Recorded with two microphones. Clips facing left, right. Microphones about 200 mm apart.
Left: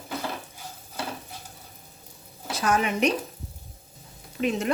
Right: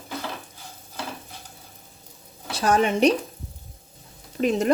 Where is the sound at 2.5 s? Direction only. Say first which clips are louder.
Right 4 dB; 30° right (ahead or behind).